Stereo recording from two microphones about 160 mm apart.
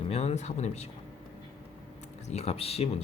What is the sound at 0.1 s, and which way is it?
Speech, 40° left (ahead or behind).